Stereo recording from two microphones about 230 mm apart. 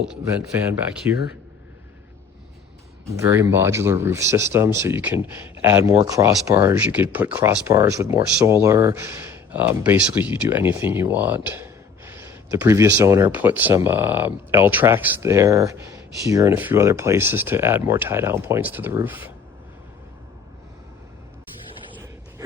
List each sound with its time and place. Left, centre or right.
1.0 s speech: centre
3.1 s speech: centre